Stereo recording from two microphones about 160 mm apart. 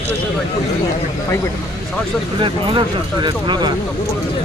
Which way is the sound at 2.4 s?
30° right (ahead or behind).